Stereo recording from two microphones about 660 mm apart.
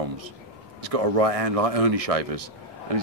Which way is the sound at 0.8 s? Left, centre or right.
Right.